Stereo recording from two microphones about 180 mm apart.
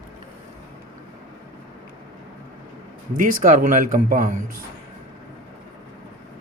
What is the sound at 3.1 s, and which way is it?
Speech, 45° right (ahead or behind).